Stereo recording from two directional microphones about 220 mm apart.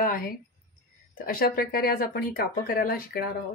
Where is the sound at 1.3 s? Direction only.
40° left (ahead or behind).